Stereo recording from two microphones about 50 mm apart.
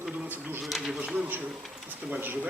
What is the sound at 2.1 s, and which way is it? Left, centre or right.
Speech, right.